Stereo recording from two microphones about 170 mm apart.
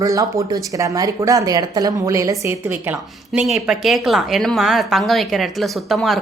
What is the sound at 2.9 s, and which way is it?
A woman's voice, 5° right (ahead or behind).